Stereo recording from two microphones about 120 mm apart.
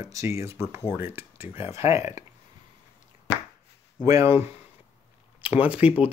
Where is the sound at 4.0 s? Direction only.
25° right (ahead or behind).